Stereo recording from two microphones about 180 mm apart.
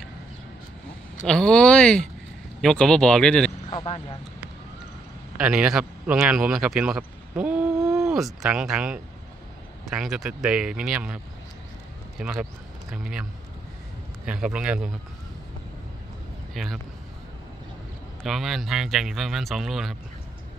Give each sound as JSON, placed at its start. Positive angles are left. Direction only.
{"t": 1.2, "sound": "speech", "side_deg": 5}
{"t": 3.7, "sound": "speech", "side_deg": 35}
{"t": 5.4, "sound": "speech", "side_deg": -5}
{"t": 12.2, "sound": "speech", "side_deg": -5}
{"t": 14.2, "sound": "speech", "side_deg": -5}
{"t": 16.5, "sound": "speech", "side_deg": 0}
{"t": 18.2, "sound": "speech", "side_deg": 0}